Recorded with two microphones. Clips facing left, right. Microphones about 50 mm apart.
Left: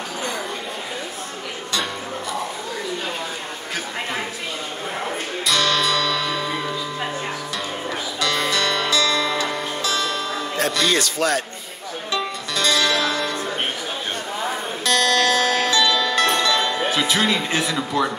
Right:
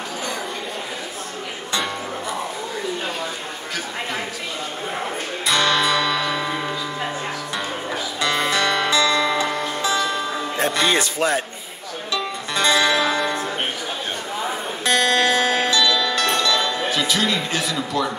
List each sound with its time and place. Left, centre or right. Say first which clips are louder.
5.5 s music: right 2 dB; right
8.2 s music: right 1 dB; right
12.5 s music: right 2 dB; right
14.9 s music: even; right
16.3 s music: left 1 dB; centre
17.7 s speech: left 1 dB; centre